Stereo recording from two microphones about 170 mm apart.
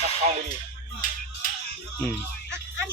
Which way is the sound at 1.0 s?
55° left (ahead or behind).